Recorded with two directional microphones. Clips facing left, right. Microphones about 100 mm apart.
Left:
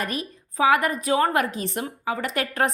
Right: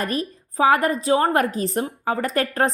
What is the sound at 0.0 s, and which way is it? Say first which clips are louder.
A woman's voice: right 4 dB; 35° right (ahead or behind).